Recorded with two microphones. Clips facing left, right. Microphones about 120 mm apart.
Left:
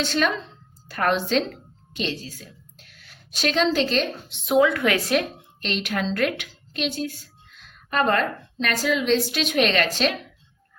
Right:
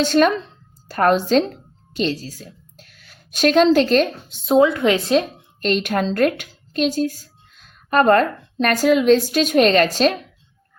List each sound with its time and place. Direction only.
0.0 s a woman's voice: 45° right (ahead or behind)
4.4 s speech: 30° right (ahead or behind)
5.5 s a woman's voice: 45° right (ahead or behind)